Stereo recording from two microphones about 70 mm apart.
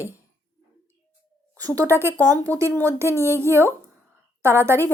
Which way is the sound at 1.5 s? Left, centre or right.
Right.